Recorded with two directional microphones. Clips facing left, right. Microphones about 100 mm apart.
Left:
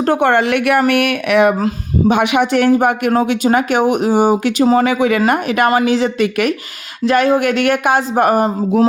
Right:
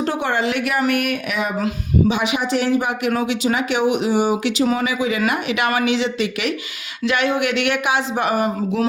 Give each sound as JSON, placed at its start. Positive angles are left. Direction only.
{"t": 0.0, "sound": "speech", "side_deg": 55}
{"t": 4.8, "sound": "speech", "side_deg": 60}
{"t": 5.3, "sound": "speech", "side_deg": 45}
{"t": 7.0, "sound": "speech", "side_deg": 40}